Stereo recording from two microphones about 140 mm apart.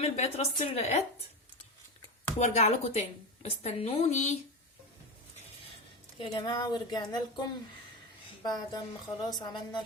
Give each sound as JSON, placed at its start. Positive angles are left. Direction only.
{"t": 0.0, "sound": "a woman's voice", "side_deg": 50}
{"t": 2.4, "sound": "a woman's voice", "side_deg": 55}
{"t": 6.1, "sound": "a woman's voice", "side_deg": 35}
{"t": 8.4, "sound": "a woman's voice", "side_deg": 30}